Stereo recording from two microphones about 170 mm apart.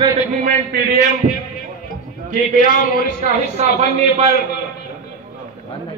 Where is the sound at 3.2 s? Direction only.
40° right (ahead or behind).